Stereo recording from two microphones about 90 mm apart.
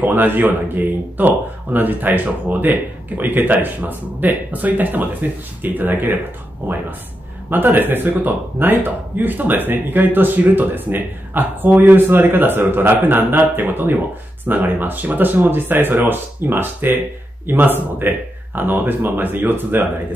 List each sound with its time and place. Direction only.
0.0 s speech: 20° right (ahead or behind)